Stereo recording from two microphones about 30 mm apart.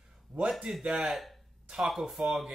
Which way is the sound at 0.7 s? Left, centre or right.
Right.